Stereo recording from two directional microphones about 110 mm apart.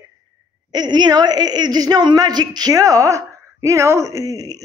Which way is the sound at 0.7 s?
40° right (ahead or behind).